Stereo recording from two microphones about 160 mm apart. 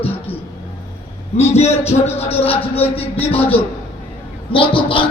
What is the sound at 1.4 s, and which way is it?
A man's voice, 40° left (ahead or behind).